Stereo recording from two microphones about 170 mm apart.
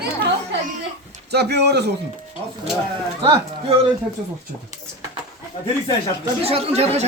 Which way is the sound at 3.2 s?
30° right (ahead or behind).